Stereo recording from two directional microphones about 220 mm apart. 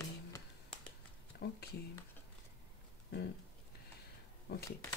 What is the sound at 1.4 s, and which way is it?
Speech, 45° left (ahead or behind).